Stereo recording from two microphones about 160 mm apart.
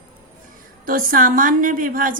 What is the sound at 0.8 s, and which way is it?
A woman's voice, 60° right (ahead or behind).